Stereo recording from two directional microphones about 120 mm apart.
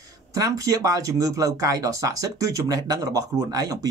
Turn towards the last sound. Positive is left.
turn(degrees=-30)  # may be behind; listen again after turning